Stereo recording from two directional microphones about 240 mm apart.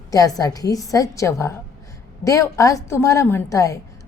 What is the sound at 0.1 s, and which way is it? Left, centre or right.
A woman's voice, centre.